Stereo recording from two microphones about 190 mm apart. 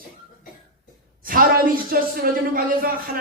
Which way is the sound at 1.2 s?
50° right (ahead or behind).